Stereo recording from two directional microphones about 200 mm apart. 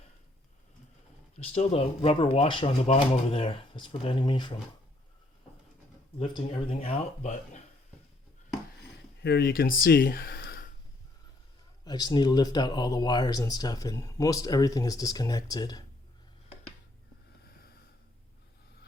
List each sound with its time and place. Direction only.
1.4 s speech: 30° left (ahead or behind)
6.1 s speech: 25° left (ahead or behind)
9.2 s speech: 55° left (ahead or behind)
11.9 s speech: 20° left (ahead or behind)